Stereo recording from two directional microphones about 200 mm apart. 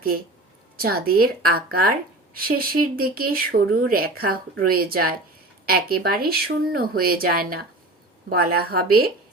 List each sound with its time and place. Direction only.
0.8 s a woman's voice: 50° right (ahead or behind)